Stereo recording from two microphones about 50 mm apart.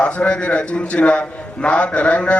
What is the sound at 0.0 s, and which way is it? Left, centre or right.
A man's voice, left.